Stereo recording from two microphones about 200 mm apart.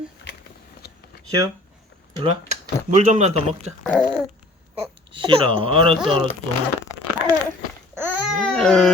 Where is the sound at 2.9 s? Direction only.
35° right (ahead or behind).